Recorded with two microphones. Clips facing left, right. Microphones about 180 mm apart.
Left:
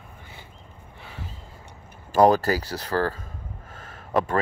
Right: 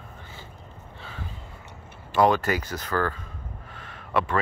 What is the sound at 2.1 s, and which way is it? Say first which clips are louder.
Speech: left 3 dB; 40° left (ahead or behind).